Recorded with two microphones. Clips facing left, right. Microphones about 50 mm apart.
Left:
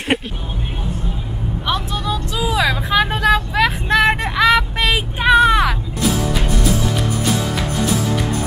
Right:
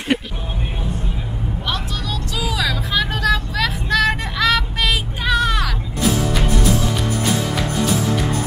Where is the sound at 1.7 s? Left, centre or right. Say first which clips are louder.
Left 6 dB; left.